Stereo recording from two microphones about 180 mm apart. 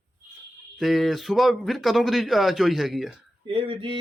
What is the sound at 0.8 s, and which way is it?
A man's voice, centre (ahead or behind).